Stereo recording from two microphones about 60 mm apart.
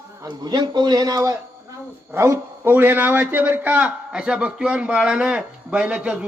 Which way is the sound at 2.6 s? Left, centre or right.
Right.